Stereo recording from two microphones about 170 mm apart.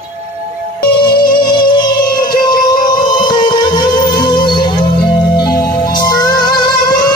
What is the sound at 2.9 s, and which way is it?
Music, 25° left (ahead or behind).